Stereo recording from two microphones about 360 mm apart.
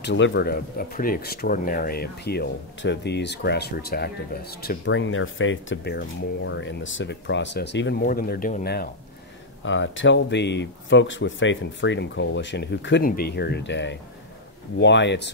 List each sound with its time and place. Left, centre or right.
0.0 s speech: left